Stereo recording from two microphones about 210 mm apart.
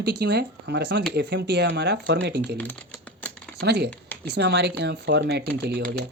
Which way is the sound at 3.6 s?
50° right (ahead or behind).